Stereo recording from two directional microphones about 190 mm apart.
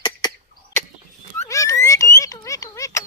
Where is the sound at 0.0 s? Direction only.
20° left (ahead or behind).